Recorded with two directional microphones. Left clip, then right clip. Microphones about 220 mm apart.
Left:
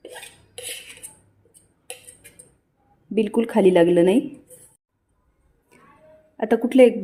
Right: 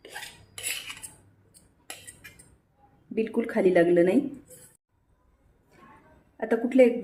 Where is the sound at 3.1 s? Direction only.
35° left (ahead or behind).